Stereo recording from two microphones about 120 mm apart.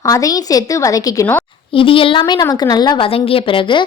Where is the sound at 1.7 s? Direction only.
45° left (ahead or behind).